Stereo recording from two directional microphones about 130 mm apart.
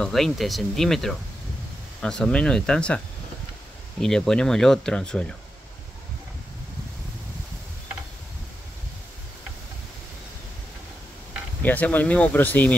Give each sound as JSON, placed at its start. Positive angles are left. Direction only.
{"t": 0.0, "sound": "speech", "side_deg": 0}
{"t": 4.0, "sound": "speech", "side_deg": 5}
{"t": 11.6, "sound": "speech", "side_deg": 15}